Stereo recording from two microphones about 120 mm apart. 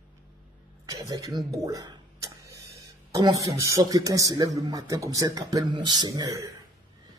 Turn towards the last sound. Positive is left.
turn(degrees=-30)  # may be behind; listen again after turning